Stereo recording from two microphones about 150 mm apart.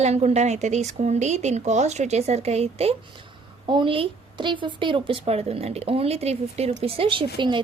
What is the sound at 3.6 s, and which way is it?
A woman's voice, 35° right (ahead or behind).